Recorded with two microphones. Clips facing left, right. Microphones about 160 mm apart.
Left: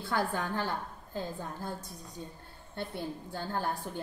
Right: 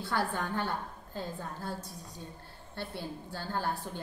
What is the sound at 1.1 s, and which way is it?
Speech, 15° left (ahead or behind).